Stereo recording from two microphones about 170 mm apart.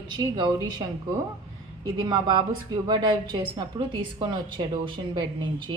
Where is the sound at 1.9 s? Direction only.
25° right (ahead or behind).